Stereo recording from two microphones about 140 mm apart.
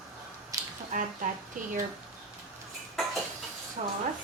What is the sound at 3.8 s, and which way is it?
Speech, 55° right (ahead or behind).